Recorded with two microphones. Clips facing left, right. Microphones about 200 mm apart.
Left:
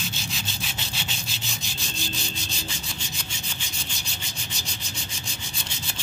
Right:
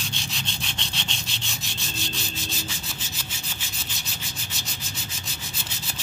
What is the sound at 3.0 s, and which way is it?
Wood, 5° right (ahead or behind).